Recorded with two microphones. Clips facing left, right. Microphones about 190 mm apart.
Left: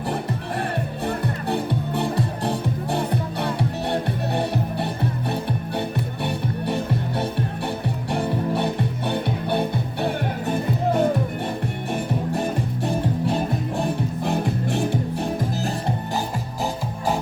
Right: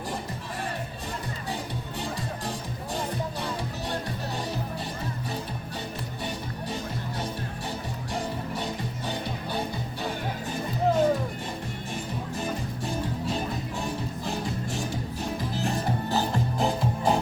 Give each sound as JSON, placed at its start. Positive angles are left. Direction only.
{"t": 1.0, "sound": "music", "side_deg": 60}
{"t": 6.2, "sound": "music", "side_deg": 65}